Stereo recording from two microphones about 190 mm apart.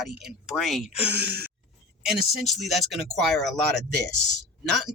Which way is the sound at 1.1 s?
55° right (ahead or behind).